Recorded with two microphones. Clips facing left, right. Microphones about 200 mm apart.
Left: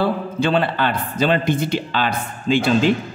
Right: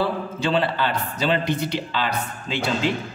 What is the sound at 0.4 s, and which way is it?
A man's voice, 55° left (ahead or behind).